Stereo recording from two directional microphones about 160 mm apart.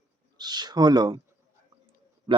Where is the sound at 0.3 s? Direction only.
25° right (ahead or behind).